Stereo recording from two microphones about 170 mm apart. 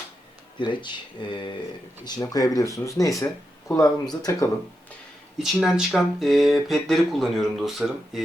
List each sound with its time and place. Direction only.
0.6 s speech: 25° left (ahead or behind)
5.4 s speech: centre (ahead or behind)